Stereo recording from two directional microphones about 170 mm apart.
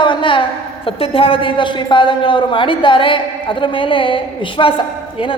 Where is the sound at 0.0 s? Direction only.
30° left (ahead or behind).